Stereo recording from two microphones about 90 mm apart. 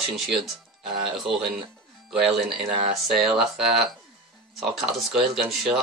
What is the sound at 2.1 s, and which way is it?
Speech, 5° right (ahead or behind).